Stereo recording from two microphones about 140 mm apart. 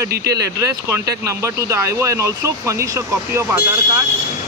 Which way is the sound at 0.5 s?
20° right (ahead or behind).